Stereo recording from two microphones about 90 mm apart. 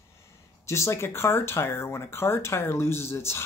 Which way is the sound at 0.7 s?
30° left (ahead or behind).